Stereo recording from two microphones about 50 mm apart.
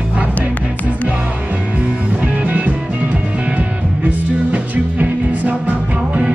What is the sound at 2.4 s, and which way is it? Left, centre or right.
Music, right.